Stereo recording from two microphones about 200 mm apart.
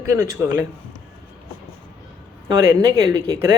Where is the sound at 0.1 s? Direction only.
15° right (ahead or behind).